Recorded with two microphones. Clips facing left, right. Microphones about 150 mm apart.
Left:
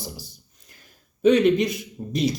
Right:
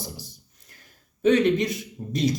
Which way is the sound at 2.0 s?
25° left (ahead or behind).